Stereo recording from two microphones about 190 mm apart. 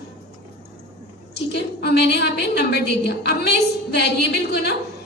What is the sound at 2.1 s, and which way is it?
A woman's voice, 60° left (ahead or behind).